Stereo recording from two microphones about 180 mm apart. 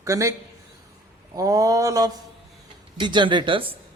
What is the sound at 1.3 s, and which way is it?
A man's voice, 20° right (ahead or behind).